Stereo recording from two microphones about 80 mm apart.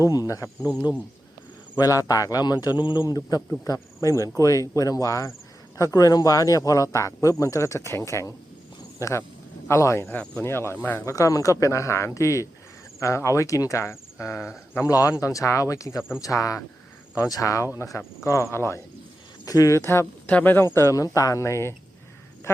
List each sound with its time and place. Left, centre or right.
0.0 s speech: left
1.8 s speech: left
3.6 s speech: left
10.1 s speech: centre
10.4 s speech: left
11.0 s speech: left
14.8 s speech: left
19.5 s speech: left
20.2 s speech: left